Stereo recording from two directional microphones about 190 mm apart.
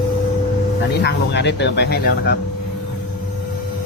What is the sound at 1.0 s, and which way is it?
Speech, 65° left (ahead or behind).